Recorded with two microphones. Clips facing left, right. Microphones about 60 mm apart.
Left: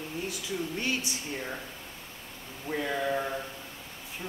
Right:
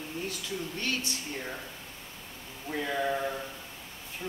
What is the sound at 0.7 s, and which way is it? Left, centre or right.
Speech, centre.